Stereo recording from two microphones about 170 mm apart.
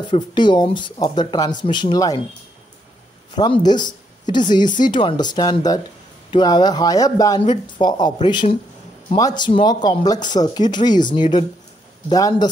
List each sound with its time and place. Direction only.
0.1 s speech: 25° left (ahead or behind)
3.3 s speech: 25° left (ahead or behind)